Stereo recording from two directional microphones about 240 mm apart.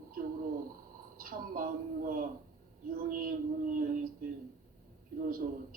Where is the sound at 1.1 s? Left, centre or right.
Right.